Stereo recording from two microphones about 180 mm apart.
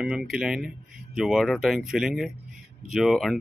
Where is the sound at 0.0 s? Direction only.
5° right (ahead or behind).